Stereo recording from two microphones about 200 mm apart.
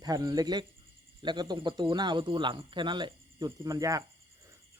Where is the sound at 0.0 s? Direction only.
20° right (ahead or behind).